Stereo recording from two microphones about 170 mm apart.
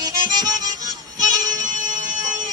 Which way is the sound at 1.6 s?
50° right (ahead or behind).